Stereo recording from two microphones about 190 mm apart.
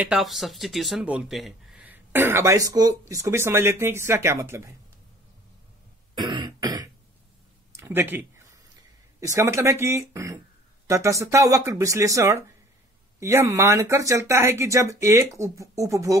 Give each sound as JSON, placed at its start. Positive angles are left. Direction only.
{"t": 0.0, "sound": "speech", "side_deg": 0}
{"t": 6.1, "sound": "throat clearing", "side_deg": -25}
{"t": 7.7, "sound": "a sound", "side_deg": -15}
{"t": 9.2, "sound": "speech", "side_deg": -15}